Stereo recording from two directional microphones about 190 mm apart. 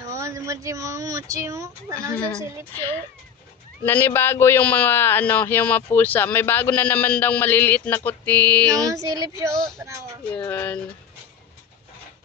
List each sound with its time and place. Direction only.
0.1 s speech: 15° right (ahead or behind)
3.8 s a man's voice: 10° left (ahead or behind)
8.8 s speech: 20° right (ahead or behind)
10.3 s a man's voice: 10° left (ahead or behind)